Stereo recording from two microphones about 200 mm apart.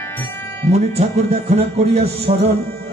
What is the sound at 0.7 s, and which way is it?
Music, 30° right (ahead or behind).